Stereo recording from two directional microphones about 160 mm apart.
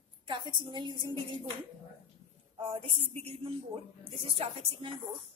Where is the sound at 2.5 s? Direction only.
35° right (ahead or behind).